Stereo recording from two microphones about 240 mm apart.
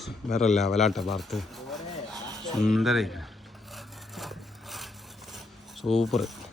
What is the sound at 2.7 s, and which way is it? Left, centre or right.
Speech, centre.